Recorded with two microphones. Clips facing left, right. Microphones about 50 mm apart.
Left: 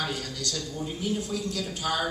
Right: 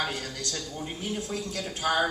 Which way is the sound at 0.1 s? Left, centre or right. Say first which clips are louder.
Left 1 dB; right.